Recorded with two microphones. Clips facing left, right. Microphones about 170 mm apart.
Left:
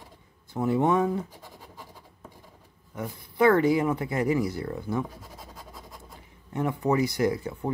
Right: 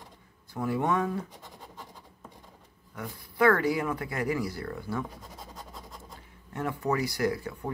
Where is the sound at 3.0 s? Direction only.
20° left (ahead or behind).